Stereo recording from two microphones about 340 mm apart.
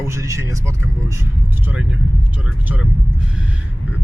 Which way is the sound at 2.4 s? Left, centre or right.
Centre.